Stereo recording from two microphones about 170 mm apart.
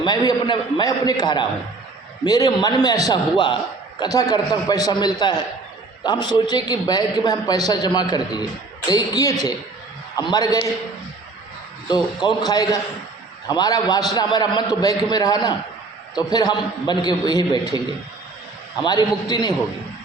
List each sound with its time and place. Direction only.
0.0 s a man's voice: 20° left (ahead or behind)
12.2 s a man's voice: 25° left (ahead or behind)
18.8 s a man's voice: 25° left (ahead or behind)